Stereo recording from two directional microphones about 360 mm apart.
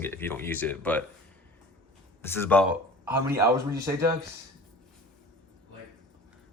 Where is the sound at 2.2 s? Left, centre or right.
Centre.